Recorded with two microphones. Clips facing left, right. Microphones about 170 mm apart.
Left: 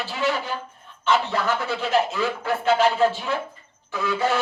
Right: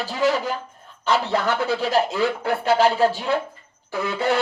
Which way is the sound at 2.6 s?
35° right (ahead or behind).